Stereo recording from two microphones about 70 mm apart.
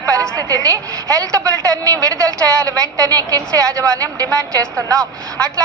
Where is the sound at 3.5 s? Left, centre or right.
Right.